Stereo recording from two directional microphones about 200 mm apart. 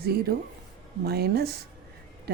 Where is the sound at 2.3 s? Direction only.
55° right (ahead or behind).